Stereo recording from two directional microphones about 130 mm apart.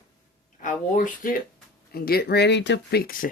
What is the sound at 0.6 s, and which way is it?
Speech, 80° left.